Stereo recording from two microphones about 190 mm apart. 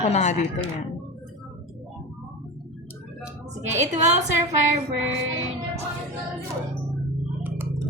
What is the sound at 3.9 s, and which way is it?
Speech, 40° right (ahead or behind).